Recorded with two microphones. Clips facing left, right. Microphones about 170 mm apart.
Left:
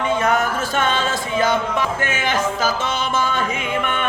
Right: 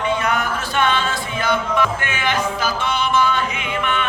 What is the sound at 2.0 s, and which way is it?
Music, 45° left (ahead or behind).